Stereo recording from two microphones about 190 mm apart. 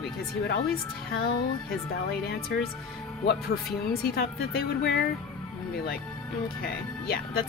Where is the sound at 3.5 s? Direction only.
60° left (ahead or behind).